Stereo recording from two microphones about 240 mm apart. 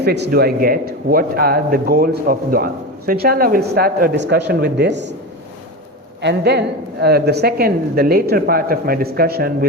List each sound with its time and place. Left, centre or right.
0.0 s a woman's voice: right
6.2 s a woman's voice: right